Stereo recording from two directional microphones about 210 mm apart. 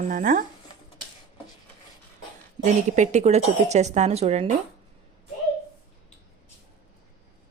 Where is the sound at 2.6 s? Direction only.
35° right (ahead or behind).